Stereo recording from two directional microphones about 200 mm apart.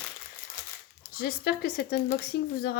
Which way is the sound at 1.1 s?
50° left (ahead or behind).